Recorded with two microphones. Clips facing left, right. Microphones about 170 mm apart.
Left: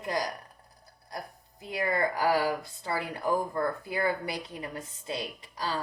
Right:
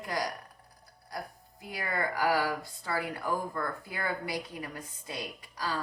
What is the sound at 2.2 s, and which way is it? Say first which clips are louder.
A woman's voice: left 2 dB; 25° left (ahead or behind).